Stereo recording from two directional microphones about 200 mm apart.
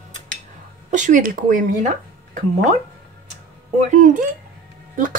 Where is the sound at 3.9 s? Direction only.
40° right (ahead or behind).